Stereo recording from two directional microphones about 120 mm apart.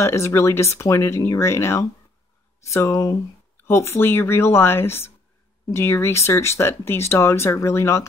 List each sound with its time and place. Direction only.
0.0 s speech: 25° left (ahead or behind)